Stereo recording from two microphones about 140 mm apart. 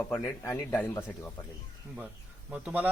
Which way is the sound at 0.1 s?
5° left (ahead or behind).